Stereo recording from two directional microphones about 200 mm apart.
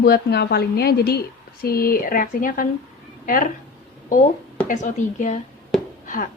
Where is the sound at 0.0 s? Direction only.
50° left (ahead or behind).